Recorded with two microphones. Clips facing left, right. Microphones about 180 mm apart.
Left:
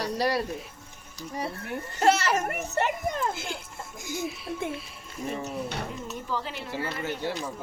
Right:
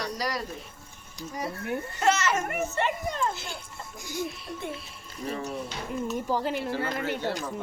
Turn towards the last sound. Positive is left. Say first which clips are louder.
# right 2 dB
turn(degrees=-45)  # may be behind; listen again after turning